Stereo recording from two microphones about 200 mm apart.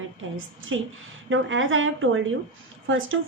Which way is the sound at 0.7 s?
70° right (ahead or behind).